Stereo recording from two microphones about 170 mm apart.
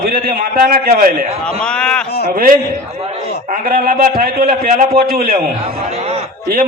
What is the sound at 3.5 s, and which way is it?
A man's voice, 55° right (ahead or behind).